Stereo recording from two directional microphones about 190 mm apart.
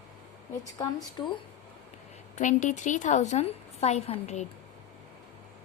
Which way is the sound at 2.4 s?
40° left (ahead or behind).